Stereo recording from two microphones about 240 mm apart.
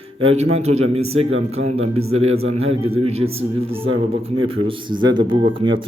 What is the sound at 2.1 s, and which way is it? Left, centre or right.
A man's voice, right.